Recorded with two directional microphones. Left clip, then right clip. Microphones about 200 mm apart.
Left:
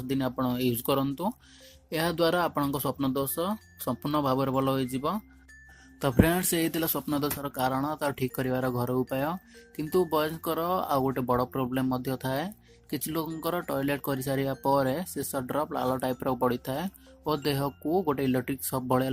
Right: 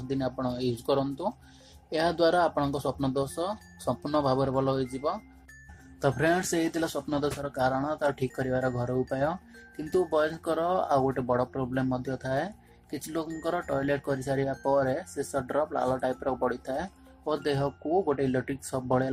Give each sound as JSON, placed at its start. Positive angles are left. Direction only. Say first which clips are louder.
{"t": 0.1, "sound": "speech", "louder": "left 1 dB", "side_deg": 50}